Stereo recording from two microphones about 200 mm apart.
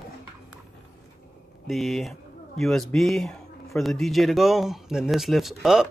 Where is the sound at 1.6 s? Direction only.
Centre (ahead or behind).